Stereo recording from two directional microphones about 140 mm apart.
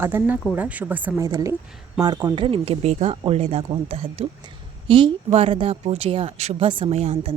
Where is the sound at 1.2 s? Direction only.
20° right (ahead or behind).